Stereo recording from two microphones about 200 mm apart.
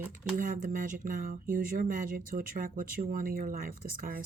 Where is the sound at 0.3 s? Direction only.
40° right (ahead or behind).